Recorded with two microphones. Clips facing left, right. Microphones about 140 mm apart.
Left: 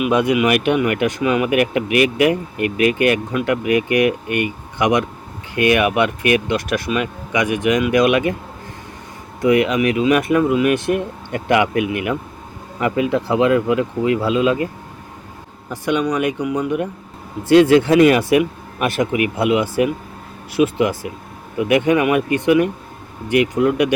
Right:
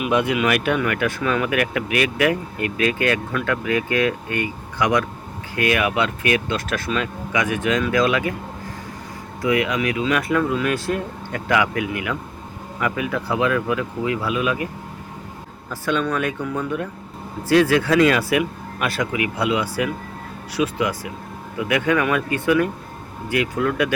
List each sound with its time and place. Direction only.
0.1 s speech: 20° left (ahead or behind)
9.4 s speech: 20° left (ahead or behind)
15.7 s speech: 15° left (ahead or behind)